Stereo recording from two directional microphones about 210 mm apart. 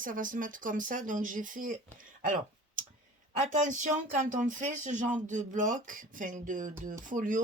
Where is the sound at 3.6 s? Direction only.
35° right (ahead or behind).